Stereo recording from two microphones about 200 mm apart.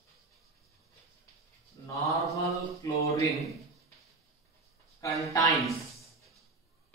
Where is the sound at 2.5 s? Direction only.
15° left (ahead or behind).